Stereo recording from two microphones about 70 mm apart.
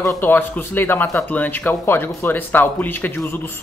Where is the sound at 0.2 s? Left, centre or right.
Left.